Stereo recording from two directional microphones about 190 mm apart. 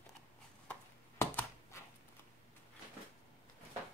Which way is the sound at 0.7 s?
10° left (ahead or behind).